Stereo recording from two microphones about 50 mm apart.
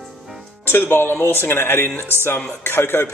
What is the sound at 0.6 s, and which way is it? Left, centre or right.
Speech, left.